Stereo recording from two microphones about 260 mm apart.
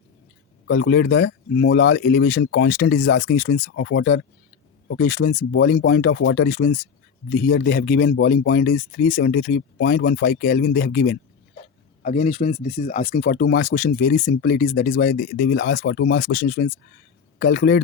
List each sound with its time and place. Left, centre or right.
0.7 s a man's voice: left
12.0 s speech: left
13.2 s a man's voice: left